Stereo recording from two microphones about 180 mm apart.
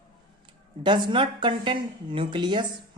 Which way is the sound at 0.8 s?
25° right (ahead or behind).